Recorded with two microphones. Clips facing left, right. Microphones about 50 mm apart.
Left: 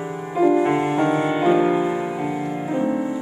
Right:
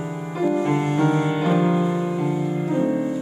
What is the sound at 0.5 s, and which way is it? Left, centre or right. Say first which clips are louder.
Music: left 3 dB; centre.